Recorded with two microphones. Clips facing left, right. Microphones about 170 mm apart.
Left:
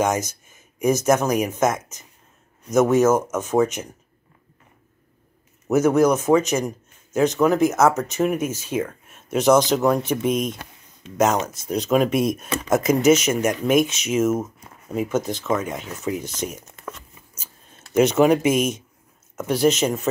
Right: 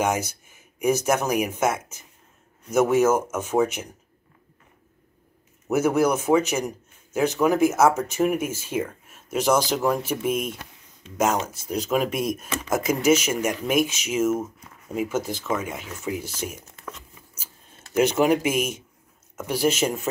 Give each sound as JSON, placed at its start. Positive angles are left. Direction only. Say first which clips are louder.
{"t": 0.0, "sound": "speech", "louder": "left 2 dB", "side_deg": -10}
{"t": 5.7, "sound": "speech", "louder": "left 4 dB", "side_deg": -10}
{"t": 8.5, "sound": "speech", "louder": "left 2 dB", "side_deg": 20}
{"t": 8.7, "sound": "speech", "louder": "left 2 dB", "side_deg": -10}
{"t": 11.7, "sound": "speech", "louder": "left 5 dB", "side_deg": -5}
{"t": 17.9, "sound": "speech", "louder": "left 3 dB", "side_deg": -10}